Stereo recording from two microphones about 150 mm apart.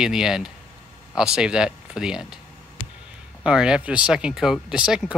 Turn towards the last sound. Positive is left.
turn(degrees=-5)  # may be behind; listen again after turning